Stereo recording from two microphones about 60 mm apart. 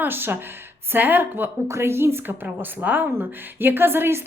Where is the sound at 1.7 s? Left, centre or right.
Right.